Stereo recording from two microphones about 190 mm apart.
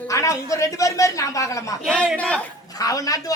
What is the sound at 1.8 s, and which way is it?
Speech, centre (ahead or behind).